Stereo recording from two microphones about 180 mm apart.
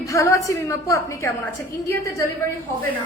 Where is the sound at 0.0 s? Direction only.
15° left (ahead or behind).